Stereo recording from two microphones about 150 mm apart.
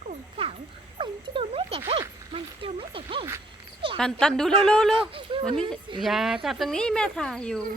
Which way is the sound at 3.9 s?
5° left (ahead or behind).